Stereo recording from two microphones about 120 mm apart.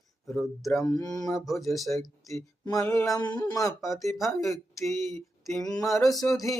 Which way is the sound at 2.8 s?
15° left (ahead or behind).